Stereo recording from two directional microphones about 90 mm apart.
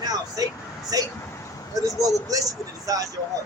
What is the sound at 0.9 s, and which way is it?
Speech, 45° right (ahead or behind).